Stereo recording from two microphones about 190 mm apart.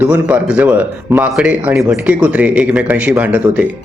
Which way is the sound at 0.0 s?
10° right (ahead or behind).